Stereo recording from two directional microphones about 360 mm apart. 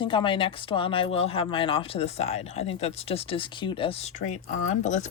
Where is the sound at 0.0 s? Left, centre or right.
Centre.